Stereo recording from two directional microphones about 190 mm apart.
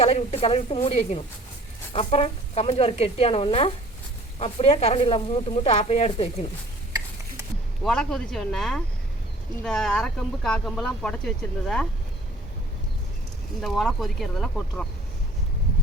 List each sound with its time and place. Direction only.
0.0 s speech: 35° left (ahead or behind)
7.9 s speech: 5° left (ahead or behind)
13.6 s speech: centre (ahead or behind)